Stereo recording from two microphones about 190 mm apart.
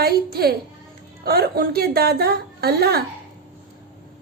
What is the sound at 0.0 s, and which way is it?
A woman's voice, 55° right (ahead or behind).